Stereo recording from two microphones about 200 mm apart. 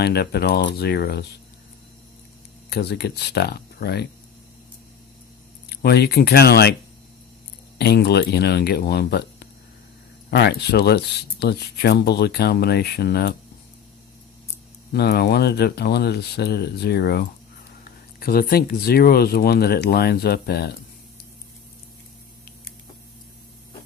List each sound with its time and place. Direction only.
0.0 s speech: 55° left (ahead or behind)
2.6 s speech: 55° left (ahead or behind)
5.6 s speech: 55° left (ahead or behind)
7.8 s speech: 55° left (ahead or behind)
14.9 s speech: 55° left (ahead or behind)